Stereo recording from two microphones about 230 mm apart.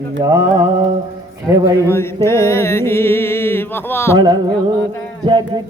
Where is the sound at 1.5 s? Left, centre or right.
Centre.